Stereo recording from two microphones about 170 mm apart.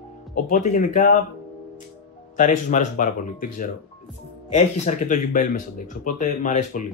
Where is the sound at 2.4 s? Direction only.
50° left (ahead or behind).